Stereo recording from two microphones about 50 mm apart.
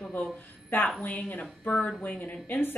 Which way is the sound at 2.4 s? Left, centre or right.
Left.